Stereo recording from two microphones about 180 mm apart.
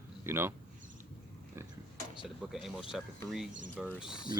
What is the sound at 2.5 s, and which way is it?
Speech, centre (ahead or behind).